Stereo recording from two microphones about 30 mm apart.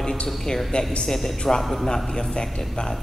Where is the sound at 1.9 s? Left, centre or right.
Left.